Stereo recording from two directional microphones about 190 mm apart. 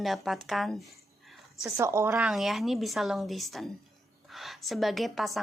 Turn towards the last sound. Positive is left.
turn(degrees=0)  # may be behind; listen again after turning